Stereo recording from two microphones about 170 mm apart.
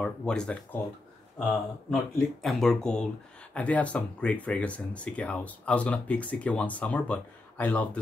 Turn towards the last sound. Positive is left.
turn(degrees=10)  # may be behind; listen again after turning